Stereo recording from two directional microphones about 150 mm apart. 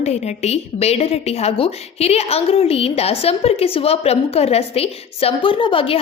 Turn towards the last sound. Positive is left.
turn(degrees=35)  # may be behind; listen again after turning